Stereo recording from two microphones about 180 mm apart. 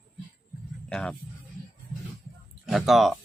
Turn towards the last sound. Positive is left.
turn(degrees=0)  # may be behind; listen again after turning